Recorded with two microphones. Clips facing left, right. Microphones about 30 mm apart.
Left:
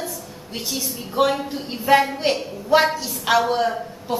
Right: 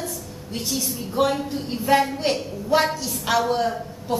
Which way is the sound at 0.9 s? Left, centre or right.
Centre.